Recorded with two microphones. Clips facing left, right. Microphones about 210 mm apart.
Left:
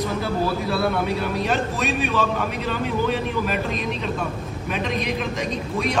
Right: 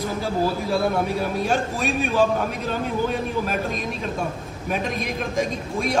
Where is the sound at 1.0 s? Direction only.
45° right (ahead or behind).